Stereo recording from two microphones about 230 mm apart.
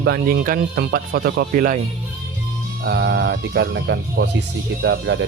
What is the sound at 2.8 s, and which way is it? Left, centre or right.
Speech, right.